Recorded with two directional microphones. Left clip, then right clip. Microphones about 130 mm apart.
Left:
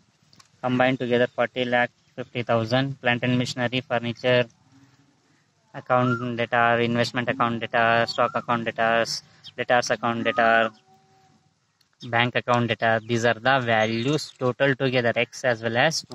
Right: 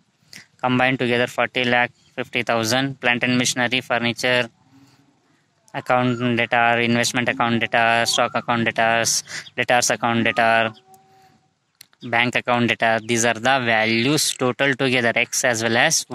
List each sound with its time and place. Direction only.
0.3 s speech: 20° right (ahead or behind)
5.7 s speech: 20° right (ahead or behind)
11.8 s speech: 20° right (ahead or behind)